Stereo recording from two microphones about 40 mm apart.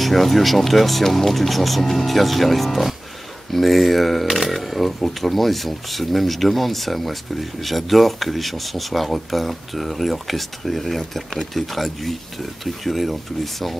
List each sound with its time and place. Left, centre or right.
0.0 s speech: centre